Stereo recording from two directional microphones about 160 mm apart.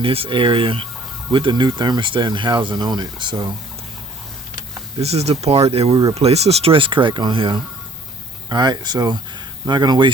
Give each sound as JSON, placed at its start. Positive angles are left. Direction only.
{"t": 0.0, "sound": "speech", "side_deg": -35}
{"t": 4.9, "sound": "speech", "side_deg": -40}